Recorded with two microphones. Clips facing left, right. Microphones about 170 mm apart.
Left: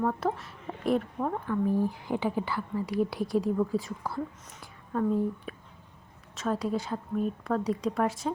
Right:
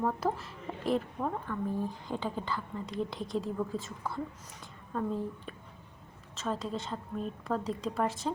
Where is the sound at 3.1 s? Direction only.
20° right (ahead or behind).